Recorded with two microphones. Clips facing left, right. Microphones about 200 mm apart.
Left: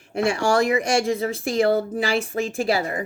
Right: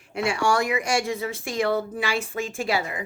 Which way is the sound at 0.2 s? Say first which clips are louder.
Left 3 dB; 40° left (ahead or behind).